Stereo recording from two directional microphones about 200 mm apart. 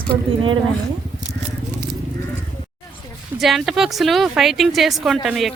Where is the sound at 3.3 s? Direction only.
Centre (ahead or behind).